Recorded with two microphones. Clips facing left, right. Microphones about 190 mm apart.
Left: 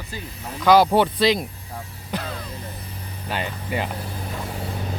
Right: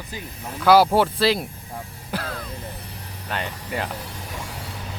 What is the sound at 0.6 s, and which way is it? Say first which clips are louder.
Speech: even; 5° right (ahead or behind).